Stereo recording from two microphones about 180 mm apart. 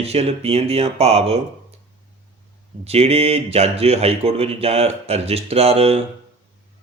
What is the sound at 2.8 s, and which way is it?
Speech, 35° right (ahead or behind).